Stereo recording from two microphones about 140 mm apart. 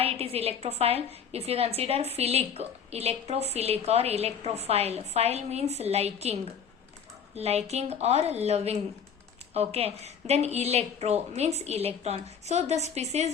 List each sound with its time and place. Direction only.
0.0 s a woman's voice: 45° right (ahead or behind)